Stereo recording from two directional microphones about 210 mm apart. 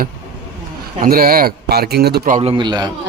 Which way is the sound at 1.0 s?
45° right (ahead or behind).